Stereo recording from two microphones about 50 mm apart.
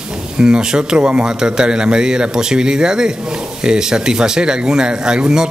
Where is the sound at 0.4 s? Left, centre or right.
Centre.